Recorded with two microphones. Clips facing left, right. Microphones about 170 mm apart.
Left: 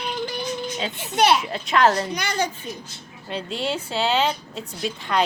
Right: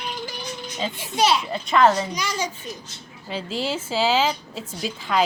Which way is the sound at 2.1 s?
60° left (ahead or behind).